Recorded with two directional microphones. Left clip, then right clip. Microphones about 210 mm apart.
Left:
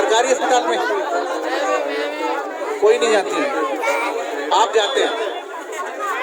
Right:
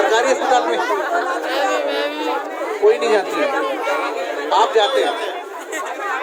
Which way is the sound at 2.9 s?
50° left (ahead or behind).